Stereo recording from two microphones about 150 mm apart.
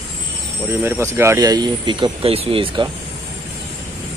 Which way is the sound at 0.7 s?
15° right (ahead or behind).